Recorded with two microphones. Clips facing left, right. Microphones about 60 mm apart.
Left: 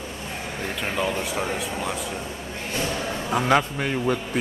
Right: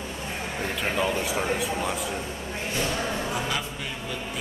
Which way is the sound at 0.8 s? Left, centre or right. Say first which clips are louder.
Even; centre.